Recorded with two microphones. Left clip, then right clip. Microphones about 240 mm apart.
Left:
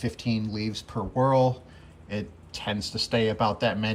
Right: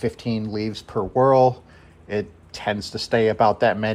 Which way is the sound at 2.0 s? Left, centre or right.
Centre.